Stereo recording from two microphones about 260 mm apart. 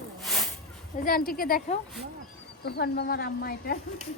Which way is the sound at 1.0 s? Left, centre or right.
Left.